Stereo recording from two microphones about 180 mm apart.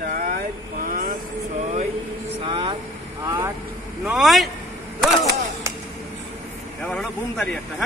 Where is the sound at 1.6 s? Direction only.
40° right (ahead or behind).